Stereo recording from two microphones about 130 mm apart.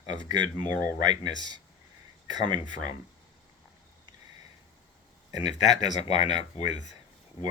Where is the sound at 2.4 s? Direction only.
75° left (ahead or behind).